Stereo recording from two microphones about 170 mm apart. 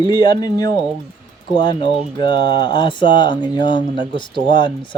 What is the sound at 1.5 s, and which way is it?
Speech, 30° left (ahead or behind).